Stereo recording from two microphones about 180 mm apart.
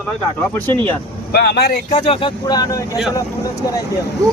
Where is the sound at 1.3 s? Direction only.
65° left (ahead or behind).